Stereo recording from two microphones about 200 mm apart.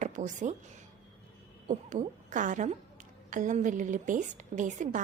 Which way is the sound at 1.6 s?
40° right (ahead or behind).